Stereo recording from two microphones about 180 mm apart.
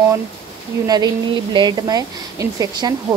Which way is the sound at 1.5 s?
25° right (ahead or behind).